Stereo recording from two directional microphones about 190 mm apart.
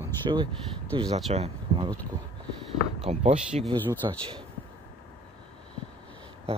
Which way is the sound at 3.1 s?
35° right (ahead or behind).